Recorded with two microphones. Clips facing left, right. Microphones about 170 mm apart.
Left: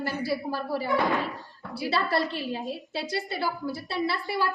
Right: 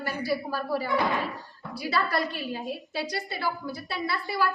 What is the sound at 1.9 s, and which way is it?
A woman's voice, 30° left (ahead or behind).